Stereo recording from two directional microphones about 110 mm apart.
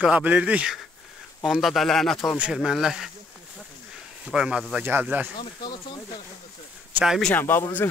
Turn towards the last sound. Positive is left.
turn(degrees=20)  # may be behind; listen again after turning